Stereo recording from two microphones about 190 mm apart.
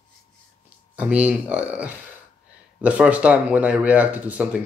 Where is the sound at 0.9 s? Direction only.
10° right (ahead or behind).